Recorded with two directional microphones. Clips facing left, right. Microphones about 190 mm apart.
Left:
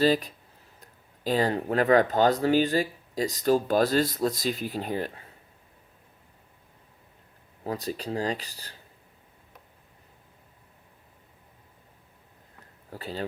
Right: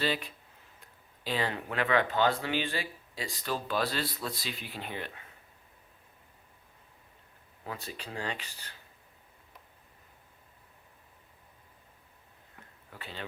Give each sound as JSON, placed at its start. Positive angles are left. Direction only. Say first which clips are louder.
{"t": 0.0, "sound": "speech", "louder": "left 9 dB", "side_deg": 40}
{"t": 7.6, "sound": "speech", "louder": "left 10 dB", "side_deg": 35}
{"t": 12.9, "sound": "speech", "louder": "left 9 dB", "side_deg": 40}